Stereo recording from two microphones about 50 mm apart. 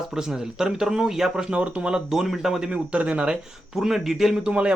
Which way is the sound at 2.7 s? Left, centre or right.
Right.